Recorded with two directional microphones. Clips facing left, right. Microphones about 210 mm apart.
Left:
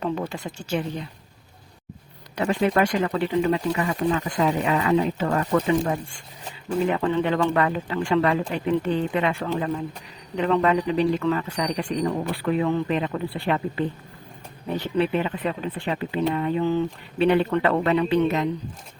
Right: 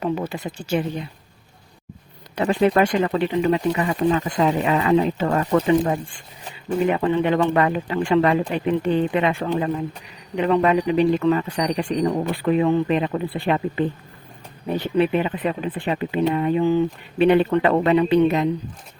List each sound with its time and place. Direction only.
0.0 s speech: 10° right (ahead or behind)
2.3 s speech: 25° right (ahead or behind)
6.7 s speech: 15° right (ahead or behind)
14.9 s speech: 15° right (ahead or behind)